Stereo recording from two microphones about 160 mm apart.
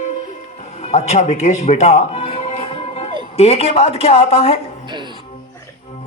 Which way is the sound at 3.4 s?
40° left (ahead or behind).